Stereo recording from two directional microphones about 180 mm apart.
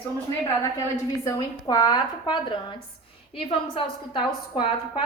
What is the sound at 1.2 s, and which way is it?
A woman's voice, 20° left (ahead or behind).